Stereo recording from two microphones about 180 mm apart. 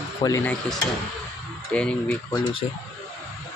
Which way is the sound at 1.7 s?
5° left (ahead or behind).